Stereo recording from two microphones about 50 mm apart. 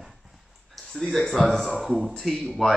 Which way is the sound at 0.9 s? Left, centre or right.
Centre.